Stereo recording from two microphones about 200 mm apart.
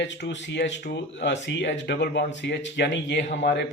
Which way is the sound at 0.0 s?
65° left (ahead or behind).